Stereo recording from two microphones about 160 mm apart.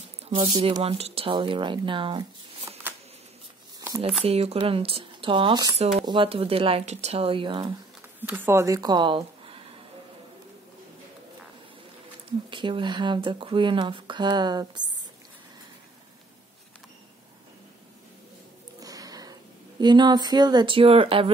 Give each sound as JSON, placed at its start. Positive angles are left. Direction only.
{"t": 0.3, "sound": "speech", "side_deg": -35}
{"t": 4.2, "sound": "speech", "side_deg": -40}
{"t": 5.8, "sound": "speech", "side_deg": -45}
{"t": 8.2, "sound": "speech", "side_deg": -15}
{"t": 12.4, "sound": "speech", "side_deg": -30}
{"t": 18.8, "sound": "a sound", "side_deg": -20}
{"t": 19.8, "sound": "speech", "side_deg": -25}